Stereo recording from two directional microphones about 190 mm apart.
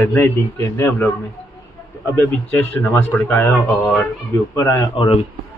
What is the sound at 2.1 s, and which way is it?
A man's voice, 10° left (ahead or behind).